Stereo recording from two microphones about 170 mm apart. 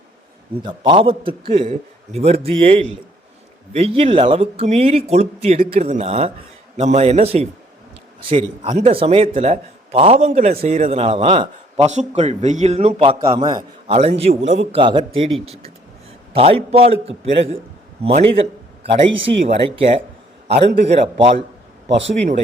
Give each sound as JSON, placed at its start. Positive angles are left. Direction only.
{"t": 0.6, "sound": "a man's voice", "side_deg": -25}
{"t": 13.8, "sound": "a man's voice", "side_deg": -40}
{"t": 16.3, "sound": "a man's voice", "side_deg": -35}
{"t": 21.8, "sound": "speech", "side_deg": -90}